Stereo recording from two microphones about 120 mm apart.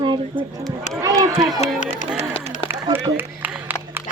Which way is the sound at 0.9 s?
25° right (ahead or behind).